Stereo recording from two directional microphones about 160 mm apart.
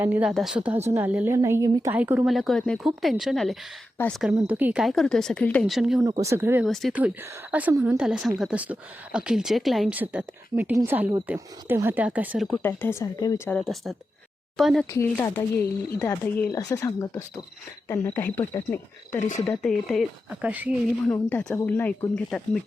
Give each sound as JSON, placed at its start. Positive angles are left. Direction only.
{"t": 0.0, "sound": "a woman's voice", "side_deg": -10}
{"t": 1.9, "sound": "speech", "side_deg": -10}
{"t": 5.7, "sound": "speech", "side_deg": -5}
{"t": 6.0, "sound": "a woman's voice", "side_deg": -20}
{"t": 12.6, "sound": "speech", "side_deg": 15}
{"t": 13.5, "sound": "speech", "side_deg": 0}
{"t": 14.8, "sound": "speech", "side_deg": 15}
{"t": 16.5, "sound": "speech", "side_deg": 20}
{"t": 20.4, "sound": "a woman's voice", "side_deg": -10}
{"t": 21.1, "sound": "speech", "side_deg": 10}